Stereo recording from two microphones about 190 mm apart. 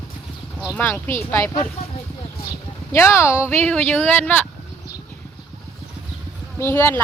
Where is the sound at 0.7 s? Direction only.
10° left (ahead or behind).